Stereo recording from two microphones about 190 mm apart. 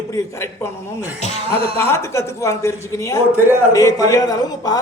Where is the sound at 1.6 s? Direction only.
30° right (ahead or behind).